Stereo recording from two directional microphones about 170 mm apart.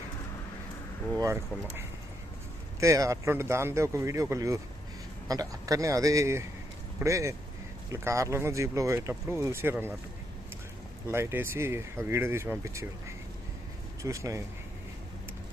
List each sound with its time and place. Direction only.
1.2 s speech: 15° right (ahead or behind)
2.8 s speech: 20° right (ahead or behind)
11.1 s speech: 15° right (ahead or behind)